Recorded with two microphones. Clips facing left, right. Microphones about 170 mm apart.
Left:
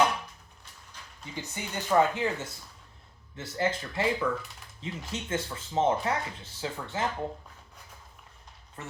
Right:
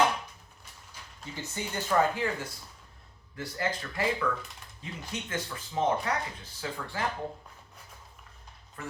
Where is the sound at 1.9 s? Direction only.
15° left (ahead or behind).